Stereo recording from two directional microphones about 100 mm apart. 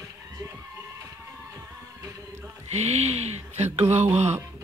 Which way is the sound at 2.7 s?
90° right.